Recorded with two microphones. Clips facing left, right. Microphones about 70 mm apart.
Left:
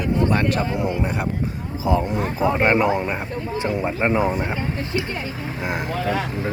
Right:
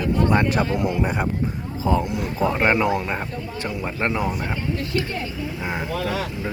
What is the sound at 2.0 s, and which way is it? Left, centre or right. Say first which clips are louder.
Speech: left 3 dB; left.